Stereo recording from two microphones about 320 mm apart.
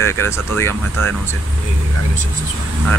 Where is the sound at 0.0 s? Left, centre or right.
Centre.